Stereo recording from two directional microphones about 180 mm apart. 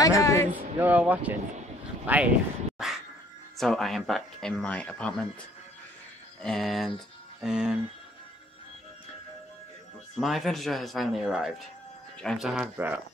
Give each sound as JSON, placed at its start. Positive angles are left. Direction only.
{"t": 0.0, "sound": "a man's voice", "side_deg": 20}
{"t": 0.7, "sound": "speech", "side_deg": -10}
{"t": 2.8, "sound": "music", "side_deg": 0}
{"t": 3.5, "sound": "speech", "side_deg": 0}
{"t": 6.4, "sound": "speech", "side_deg": 0}
{"t": 10.1, "sound": "speech", "side_deg": 0}